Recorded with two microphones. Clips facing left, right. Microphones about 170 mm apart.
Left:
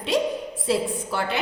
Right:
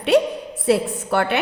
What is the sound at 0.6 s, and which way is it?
Speech, 65° right (ahead or behind).